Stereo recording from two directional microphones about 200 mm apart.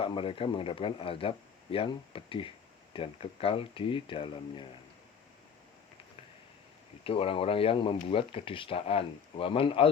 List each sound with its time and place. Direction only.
0.0 s speech: 25° left (ahead or behind)
7.0 s speech: 30° left (ahead or behind)